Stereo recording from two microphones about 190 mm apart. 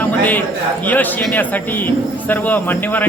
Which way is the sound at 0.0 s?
10° left (ahead or behind).